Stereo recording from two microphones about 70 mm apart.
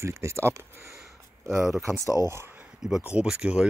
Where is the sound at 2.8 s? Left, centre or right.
Centre.